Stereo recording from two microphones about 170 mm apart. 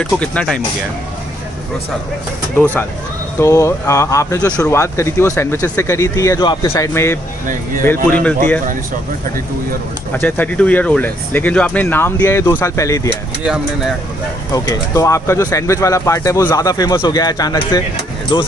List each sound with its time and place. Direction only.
0.0 s speech: 5° left (ahead or behind)
2.5 s speech: 10° left (ahead or behind)
10.1 s speech: 10° left (ahead or behind)
14.5 s speech: 20° left (ahead or behind)